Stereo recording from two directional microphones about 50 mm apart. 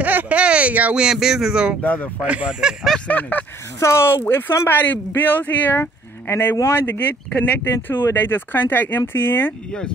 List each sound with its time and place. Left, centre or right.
0.0 s a sound: right
0.9 s speech: centre
1.8 s speech: left
2.6 s speech: centre
3.1 s speech: left
3.8 s speech: left
4.2 s speech: left
6.2 s speech: left
6.9 s speech: left